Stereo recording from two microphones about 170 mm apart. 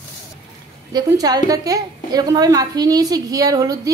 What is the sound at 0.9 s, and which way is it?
A woman's voice, 20° right (ahead or behind).